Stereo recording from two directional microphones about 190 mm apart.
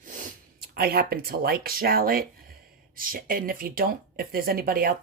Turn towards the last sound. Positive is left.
turn(degrees=-50)  # may be behind; listen again after turning